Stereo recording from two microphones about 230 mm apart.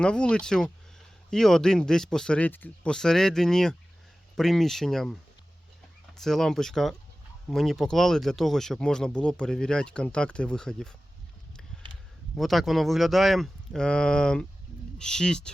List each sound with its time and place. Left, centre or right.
0.0 s speech: centre
6.1 s speech: centre
12.4 s speech: centre